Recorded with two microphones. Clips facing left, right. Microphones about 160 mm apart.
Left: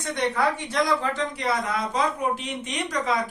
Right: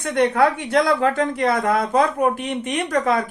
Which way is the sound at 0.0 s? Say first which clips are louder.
Right 7 dB; 60° right (ahead or behind).